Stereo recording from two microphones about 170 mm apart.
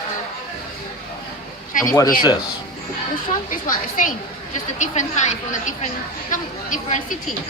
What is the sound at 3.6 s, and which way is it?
A woman's voice, 50° left (ahead or behind).